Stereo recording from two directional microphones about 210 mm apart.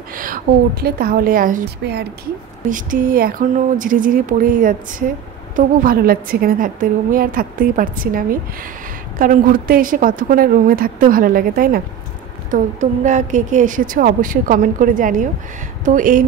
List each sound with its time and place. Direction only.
0.1 s a woman's voice: 40° right (ahead or behind)
1.8 s speech: 55° right (ahead or behind)
2.7 s speech: 40° right (ahead or behind)